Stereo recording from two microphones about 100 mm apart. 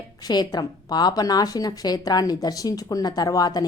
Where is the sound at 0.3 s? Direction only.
45° left (ahead or behind).